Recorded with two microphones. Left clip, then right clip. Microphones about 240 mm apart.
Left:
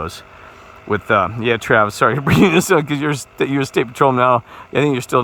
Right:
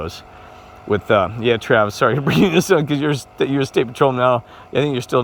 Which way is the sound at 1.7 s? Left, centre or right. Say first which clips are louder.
Left 2 dB; left.